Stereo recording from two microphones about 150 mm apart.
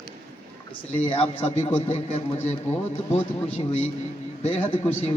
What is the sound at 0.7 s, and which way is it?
A man's voice, 35° left (ahead or behind).